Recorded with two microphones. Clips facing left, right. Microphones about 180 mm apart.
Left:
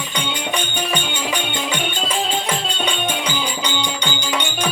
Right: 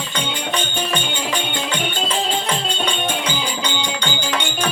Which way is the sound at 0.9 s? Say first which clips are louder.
Even; centre (ahead or behind).